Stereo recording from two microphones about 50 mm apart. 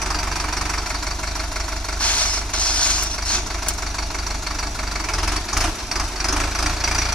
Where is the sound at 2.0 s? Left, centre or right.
Left.